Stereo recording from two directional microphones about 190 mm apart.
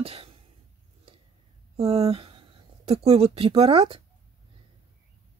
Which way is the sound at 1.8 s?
35° right (ahead or behind).